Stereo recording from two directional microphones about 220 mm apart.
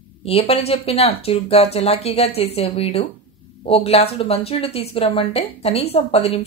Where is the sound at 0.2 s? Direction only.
25° left (ahead or behind).